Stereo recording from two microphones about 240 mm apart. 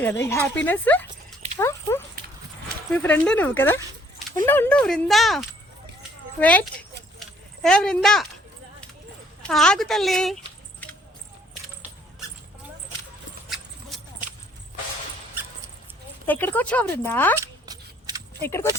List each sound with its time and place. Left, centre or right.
0.0 s speech: centre
1.5 s dog: centre
2.9 s speech: centre
6.0 s a sound: centre
9.5 s speech: centre
13.5 s horse: centre
16.2 s speech: centre
17.4 s a sound: centre
18.4 s speech: centre